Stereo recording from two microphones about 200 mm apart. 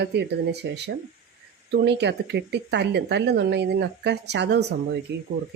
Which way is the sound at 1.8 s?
60° right (ahead or behind).